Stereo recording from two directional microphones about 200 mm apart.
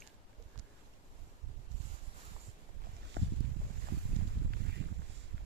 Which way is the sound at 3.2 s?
55° right (ahead or behind).